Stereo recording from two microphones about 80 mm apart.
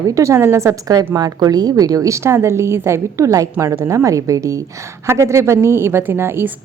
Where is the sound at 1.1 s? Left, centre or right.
Right.